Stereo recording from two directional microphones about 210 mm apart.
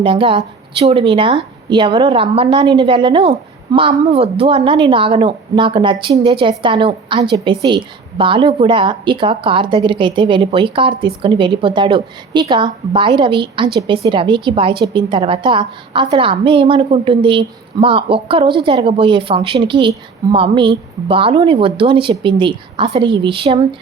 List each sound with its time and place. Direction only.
0.0 s a woman's voice: 25° right (ahead or behind)